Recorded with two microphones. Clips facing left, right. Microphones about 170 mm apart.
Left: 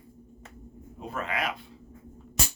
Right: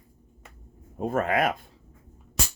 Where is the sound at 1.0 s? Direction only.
45° right (ahead or behind).